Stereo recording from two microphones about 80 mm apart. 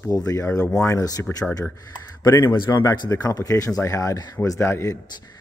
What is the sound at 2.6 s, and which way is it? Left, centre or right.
Speech, left.